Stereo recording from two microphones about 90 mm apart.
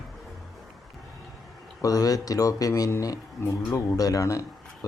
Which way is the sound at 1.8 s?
40° left (ahead or behind).